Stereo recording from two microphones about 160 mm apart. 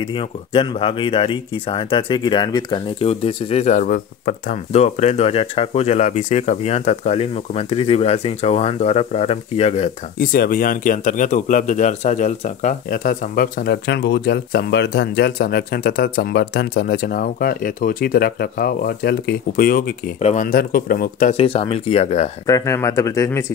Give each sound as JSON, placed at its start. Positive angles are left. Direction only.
{"t": 0.0, "sound": "speech", "side_deg": 35}
{"t": 4.7, "sound": "speech", "side_deg": 45}
{"t": 10.1, "sound": "speech", "side_deg": 65}
{"t": 20.2, "sound": "speech", "side_deg": 40}
{"t": 20.4, "sound": "speech", "side_deg": 65}
{"t": 21.3, "sound": "speech", "side_deg": 40}
{"t": 22.5, "sound": "speech", "side_deg": 20}